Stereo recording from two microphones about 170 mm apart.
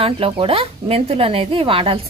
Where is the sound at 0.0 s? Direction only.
35° right (ahead or behind).